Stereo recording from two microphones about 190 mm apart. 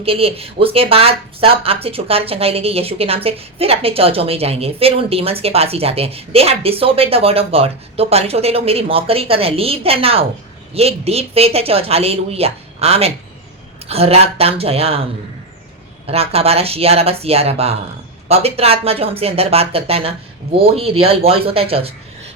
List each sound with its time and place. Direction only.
0.0 s speech: 30° right (ahead or behind)
16.0 s speech: 30° right (ahead or behind)